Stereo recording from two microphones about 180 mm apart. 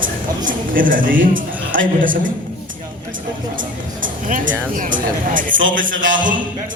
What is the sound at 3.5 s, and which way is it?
Speech, 50° right (ahead or behind).